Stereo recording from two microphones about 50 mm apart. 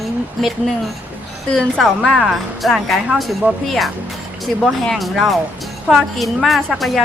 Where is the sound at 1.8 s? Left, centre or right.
Centre.